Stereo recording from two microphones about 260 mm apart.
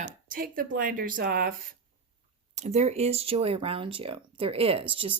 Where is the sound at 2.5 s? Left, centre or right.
Right.